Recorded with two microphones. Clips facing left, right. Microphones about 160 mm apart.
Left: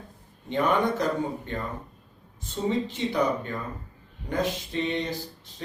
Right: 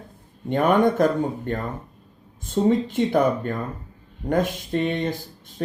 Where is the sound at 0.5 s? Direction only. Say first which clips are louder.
Right 6 dB; 50° right (ahead or behind).